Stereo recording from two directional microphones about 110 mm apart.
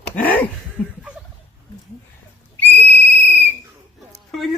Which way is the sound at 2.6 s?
15° left (ahead or behind).